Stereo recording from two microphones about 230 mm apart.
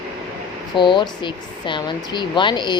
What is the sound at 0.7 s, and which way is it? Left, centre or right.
Speech, centre.